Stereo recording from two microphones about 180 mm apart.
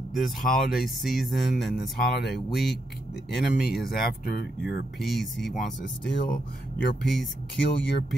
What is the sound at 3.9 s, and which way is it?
Speech, 60° left (ahead or behind).